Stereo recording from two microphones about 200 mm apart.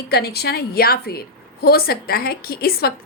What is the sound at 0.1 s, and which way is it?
A woman's voice, 50° left (ahead or behind).